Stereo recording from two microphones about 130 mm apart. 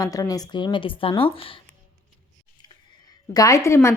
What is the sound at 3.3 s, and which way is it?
Speech, 25° left (ahead or behind).